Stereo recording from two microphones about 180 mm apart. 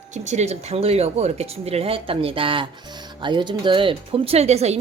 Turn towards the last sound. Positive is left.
turn(degrees=-35)  # may be behind; listen again after turning